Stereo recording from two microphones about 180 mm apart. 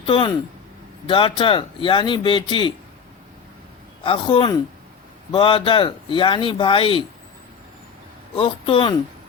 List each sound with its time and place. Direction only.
0.0 s speech: 25° left (ahead or behind)
4.0 s speech: 30° left (ahead or behind)
8.4 s speech: 30° left (ahead or behind)